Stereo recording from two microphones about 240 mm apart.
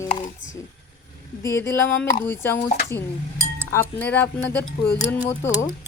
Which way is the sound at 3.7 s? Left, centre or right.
Centre.